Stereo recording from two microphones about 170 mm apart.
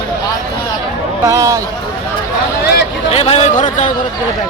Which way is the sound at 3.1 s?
35° left (ahead or behind).